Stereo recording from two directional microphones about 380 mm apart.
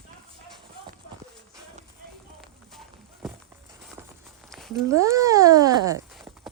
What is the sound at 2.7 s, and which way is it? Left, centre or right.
Walk, centre.